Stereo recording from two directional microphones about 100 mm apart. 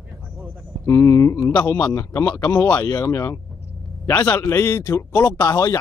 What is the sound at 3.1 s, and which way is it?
A man's voice, 25° left (ahead or behind).